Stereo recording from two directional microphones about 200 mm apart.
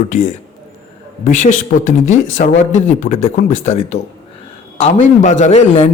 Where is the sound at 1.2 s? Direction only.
40° left (ahead or behind).